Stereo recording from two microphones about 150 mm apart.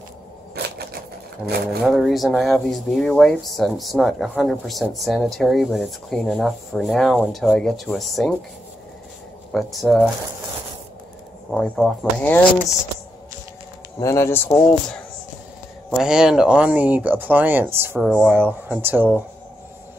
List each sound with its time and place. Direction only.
1.4 s speech: 90° right
1.8 s speech: centre (ahead or behind)
9.5 s speech: centre (ahead or behind)
11.5 s speech: 5° left (ahead or behind)
13.9 s speech: 20° left (ahead or behind)
16.0 s speech: 5° right (ahead or behind)
17.9 s speech: centre (ahead or behind)
18.3 s speech: 15° right (ahead or behind)